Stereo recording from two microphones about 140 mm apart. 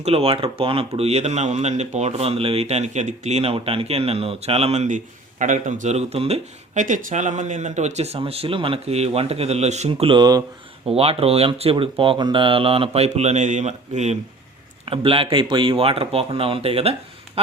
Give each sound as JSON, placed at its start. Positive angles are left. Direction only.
{"t": 0.0, "sound": "speech", "side_deg": -45}
{"t": 10.1, "sound": "speech", "side_deg": -30}
{"t": 10.8, "sound": "speech", "side_deg": -45}
{"t": 14.8, "sound": "speech", "side_deg": -40}
{"t": 17.4, "sound": "a sound", "side_deg": -45}